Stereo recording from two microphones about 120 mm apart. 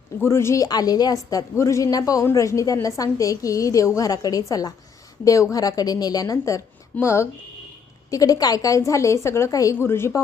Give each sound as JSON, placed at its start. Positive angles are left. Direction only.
{"t": 0.2, "sound": "a woman's voice", "side_deg": 20}